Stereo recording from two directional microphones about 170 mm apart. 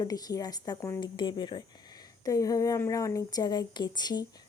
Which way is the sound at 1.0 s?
25° left (ahead or behind).